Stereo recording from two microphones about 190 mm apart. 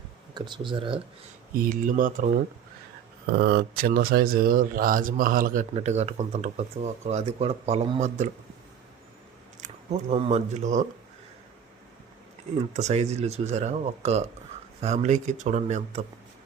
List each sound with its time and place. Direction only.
0.3 s speech: 25° right (ahead or behind)
1.5 s speech: 50° right (ahead or behind)
3.3 s speech: 55° right (ahead or behind); by 8.3 s 40° right (ahead or behind)
9.6 s speech: 35° right (ahead or behind)
12.7 s speech: 35° right (ahead or behind)